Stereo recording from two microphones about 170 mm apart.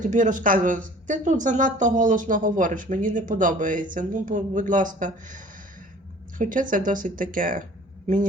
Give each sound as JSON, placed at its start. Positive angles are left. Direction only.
{"t": 0.1, "sound": "speech", "side_deg": -50}
{"t": 6.4, "sound": "a man's voice", "side_deg": -50}